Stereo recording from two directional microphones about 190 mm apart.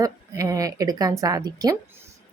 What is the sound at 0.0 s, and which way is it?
A woman's voice, 15° right (ahead or behind).